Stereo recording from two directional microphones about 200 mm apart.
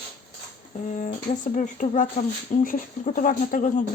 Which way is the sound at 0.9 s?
40° left (ahead or behind).